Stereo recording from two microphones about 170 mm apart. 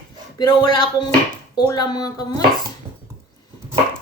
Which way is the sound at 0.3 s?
25° left (ahead or behind).